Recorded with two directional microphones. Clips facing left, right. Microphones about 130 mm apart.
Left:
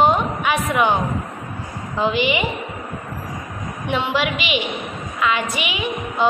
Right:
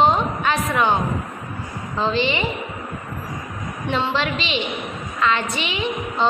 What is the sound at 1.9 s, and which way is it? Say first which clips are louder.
Speech: left 2 dB; 10° left (ahead or behind).